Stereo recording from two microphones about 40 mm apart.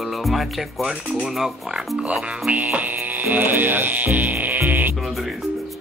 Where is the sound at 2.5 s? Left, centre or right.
Right.